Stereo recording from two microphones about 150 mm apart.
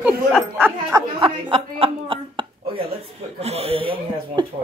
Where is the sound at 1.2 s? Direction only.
35° right (ahead or behind).